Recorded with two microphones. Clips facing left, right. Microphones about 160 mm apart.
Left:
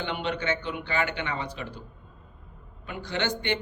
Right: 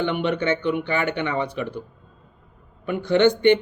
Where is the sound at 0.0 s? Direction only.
60° right (ahead or behind).